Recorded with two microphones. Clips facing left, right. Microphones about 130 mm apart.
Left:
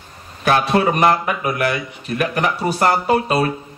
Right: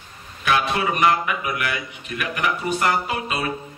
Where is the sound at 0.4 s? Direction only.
40° left (ahead or behind).